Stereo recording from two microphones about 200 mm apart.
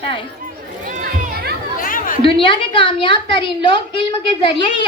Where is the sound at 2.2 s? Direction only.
25° left (ahead or behind).